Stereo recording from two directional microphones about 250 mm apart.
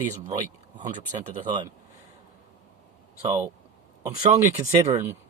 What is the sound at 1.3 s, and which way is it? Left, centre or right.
Speech, centre.